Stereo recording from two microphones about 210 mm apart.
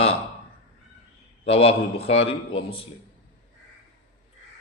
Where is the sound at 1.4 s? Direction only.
25° left (ahead or behind).